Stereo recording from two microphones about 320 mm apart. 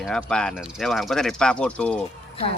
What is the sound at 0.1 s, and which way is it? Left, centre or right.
A man's voice, centre.